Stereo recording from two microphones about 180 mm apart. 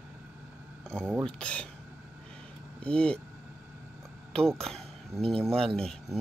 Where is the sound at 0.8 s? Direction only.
5° left (ahead or behind).